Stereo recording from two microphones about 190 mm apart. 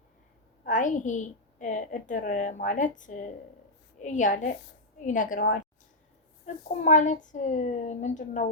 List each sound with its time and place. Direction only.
0.6 s a woman's voice: 40° left (ahead or behind)